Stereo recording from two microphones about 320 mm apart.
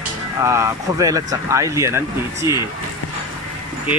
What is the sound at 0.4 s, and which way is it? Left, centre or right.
Speech, centre.